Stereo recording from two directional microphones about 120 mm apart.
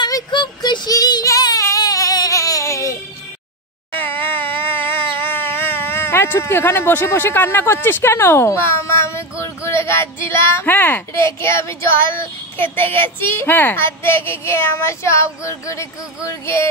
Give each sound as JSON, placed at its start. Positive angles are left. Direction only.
{"t": 0.0, "sound": "child singing", "side_deg": 40}
{"t": 3.9, "sound": "a sound", "side_deg": 15}
{"t": 5.1, "sound": "speech", "side_deg": 20}